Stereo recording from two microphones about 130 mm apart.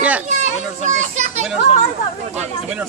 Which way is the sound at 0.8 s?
65° right (ahead or behind).